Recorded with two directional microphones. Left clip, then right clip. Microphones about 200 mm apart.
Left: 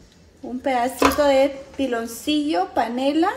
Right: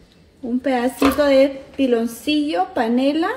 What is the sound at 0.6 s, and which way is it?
A woman's voice, 30° right (ahead or behind).